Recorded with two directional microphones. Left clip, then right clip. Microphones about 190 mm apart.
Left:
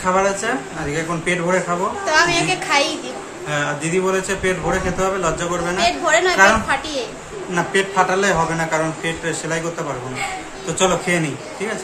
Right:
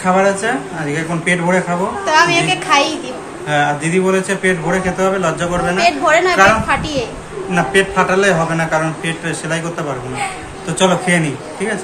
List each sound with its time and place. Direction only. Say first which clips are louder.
0.0 s a man's voice: right 4 dB; 20° left (ahead or behind)
2.0 s a woman's voice: right 4 dB; 10° right (ahead or behind)
3.4 s a man's voice: right 6 dB; 20° left (ahead or behind)
5.8 s a woman's voice: right 4 dB; 10° right (ahead or behind)
7.5 s a man's voice: right 4 dB; 25° left (ahead or behind)
10.8 s a man's voice: right 4 dB; 20° left (ahead or behind)